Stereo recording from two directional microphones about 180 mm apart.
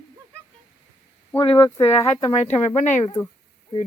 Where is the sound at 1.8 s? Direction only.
35° left (ahead or behind).